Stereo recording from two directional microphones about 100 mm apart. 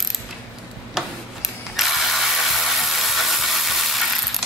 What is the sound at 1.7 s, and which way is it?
Ratchet, centre (ahead or behind).